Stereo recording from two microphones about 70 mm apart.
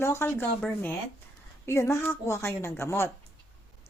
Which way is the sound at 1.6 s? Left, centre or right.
Left.